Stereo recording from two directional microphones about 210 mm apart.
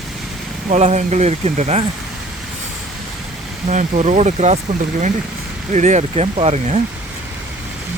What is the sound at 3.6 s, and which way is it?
Speech, 35° right (ahead or behind).